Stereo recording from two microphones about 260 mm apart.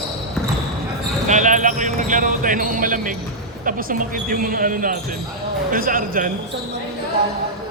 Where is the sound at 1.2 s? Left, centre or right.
Right.